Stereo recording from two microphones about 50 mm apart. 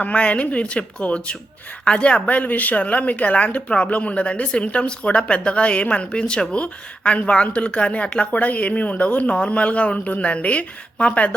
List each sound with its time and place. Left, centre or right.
0.0 s speech: left